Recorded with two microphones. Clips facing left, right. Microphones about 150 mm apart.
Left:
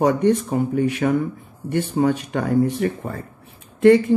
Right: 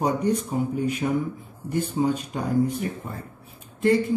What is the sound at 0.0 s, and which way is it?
Speech, 90° left.